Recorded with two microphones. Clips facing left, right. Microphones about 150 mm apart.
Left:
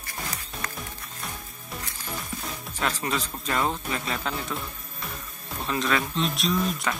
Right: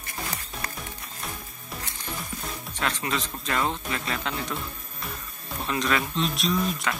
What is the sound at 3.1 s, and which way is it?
Speech, centre (ahead or behind).